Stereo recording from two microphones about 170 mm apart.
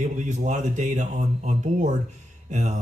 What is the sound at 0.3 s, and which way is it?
Speech, 45° right (ahead or behind).